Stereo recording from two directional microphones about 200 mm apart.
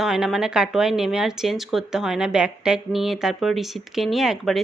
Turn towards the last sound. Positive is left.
turn(degrees=0)  # may be behind; listen again after turning